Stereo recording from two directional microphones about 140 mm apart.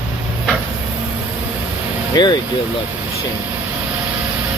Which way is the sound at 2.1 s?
30° left (ahead or behind).